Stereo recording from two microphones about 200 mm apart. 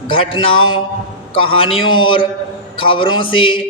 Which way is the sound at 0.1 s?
25° left (ahead or behind).